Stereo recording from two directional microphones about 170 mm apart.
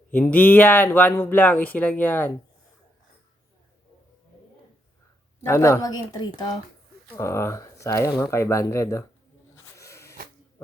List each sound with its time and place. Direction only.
0.1 s speech: 10° left (ahead or behind)
5.5 s speech: 15° left (ahead or behind)
9.7 s a sound: 15° left (ahead or behind)